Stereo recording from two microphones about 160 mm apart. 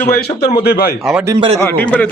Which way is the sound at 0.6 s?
75° left (ahead or behind).